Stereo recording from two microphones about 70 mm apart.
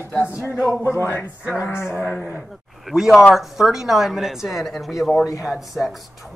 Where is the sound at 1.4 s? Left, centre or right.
Centre.